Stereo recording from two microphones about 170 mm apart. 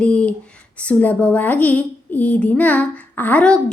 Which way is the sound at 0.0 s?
5° left (ahead or behind).